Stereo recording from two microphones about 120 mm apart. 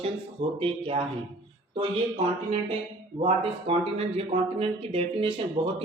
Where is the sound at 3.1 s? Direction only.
60° right (ahead or behind).